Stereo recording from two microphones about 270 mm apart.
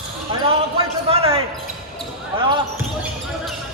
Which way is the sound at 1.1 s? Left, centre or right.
Right.